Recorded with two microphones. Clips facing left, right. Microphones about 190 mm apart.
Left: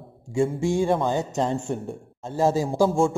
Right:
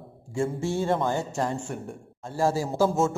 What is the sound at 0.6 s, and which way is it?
A man's voice, 15° left (ahead or behind).